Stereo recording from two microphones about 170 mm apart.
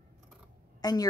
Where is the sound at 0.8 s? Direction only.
25° left (ahead or behind).